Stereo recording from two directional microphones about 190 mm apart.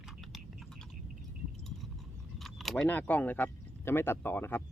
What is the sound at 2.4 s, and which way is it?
Speech, centre (ahead or behind).